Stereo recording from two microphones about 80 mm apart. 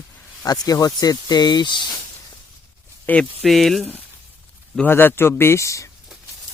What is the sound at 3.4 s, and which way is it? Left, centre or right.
Speech, centre.